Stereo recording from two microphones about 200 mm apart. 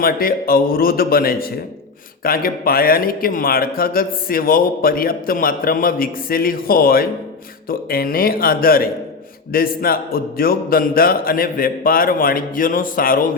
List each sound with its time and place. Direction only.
0.0 s a man's voice: 45° left (ahead or behind)